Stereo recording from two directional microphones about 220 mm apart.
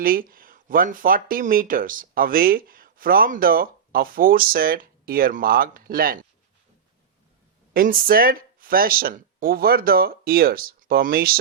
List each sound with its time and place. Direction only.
0.0 s speech: 40° right (ahead or behind)
7.7 s speech: 40° right (ahead or behind)